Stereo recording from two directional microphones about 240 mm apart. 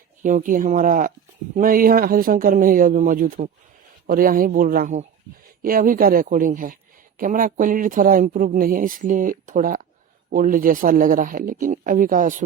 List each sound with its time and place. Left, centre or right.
0.2 s speech: right